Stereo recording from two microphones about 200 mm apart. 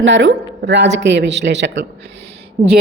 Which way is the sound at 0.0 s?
65° right (ahead or behind).